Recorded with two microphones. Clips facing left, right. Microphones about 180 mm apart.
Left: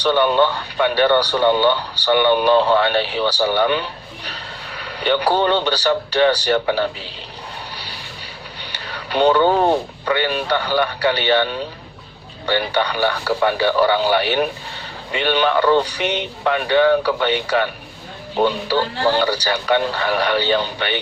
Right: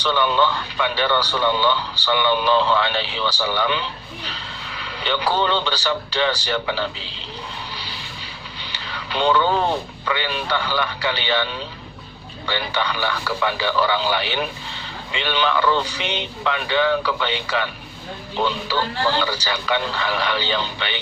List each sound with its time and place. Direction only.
0.2 s a man's voice: 45° left (ahead or behind)
3.3 s speech: 35° left (ahead or behind)
3.6 s a man's voice: 50° left (ahead or behind)
4.9 s vehicle: 45° left (ahead or behind)
5.4 s a man's voice: 50° left (ahead or behind)
9.0 s a man's voice: 40° left (ahead or behind)
16.0 s a man's voice: 50° left (ahead or behind)